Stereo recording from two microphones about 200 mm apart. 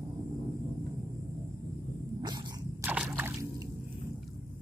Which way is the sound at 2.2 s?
20° right (ahead or behind).